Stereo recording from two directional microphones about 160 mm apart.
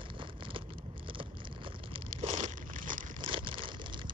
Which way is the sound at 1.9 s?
45° right (ahead or behind).